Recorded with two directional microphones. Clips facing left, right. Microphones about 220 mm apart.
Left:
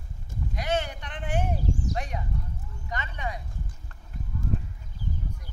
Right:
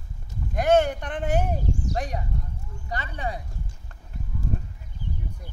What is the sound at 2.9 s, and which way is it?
Speech, 35° right (ahead or behind).